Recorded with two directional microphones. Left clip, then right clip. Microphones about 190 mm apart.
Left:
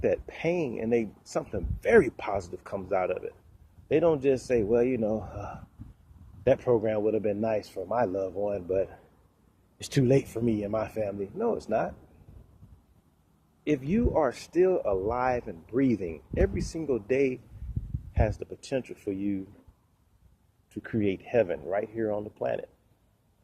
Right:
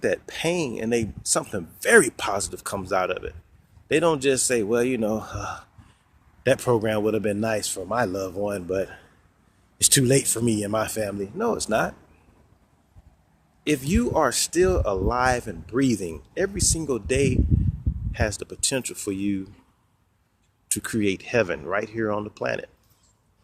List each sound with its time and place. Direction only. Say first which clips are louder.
0.0 s speech: right 3 dB; 20° right (ahead or behind)
13.7 s speech: right 4 dB; 25° right (ahead or behind)
14.7 s speech: right 3 dB; 30° right (ahead or behind)
15.0 s speech: right 5 dB; 20° right (ahead or behind)
20.7 s speech: right 5 dB; 30° right (ahead or behind)